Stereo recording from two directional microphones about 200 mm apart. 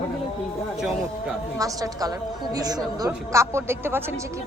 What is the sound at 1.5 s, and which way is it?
A woman's voice, 15° right (ahead or behind).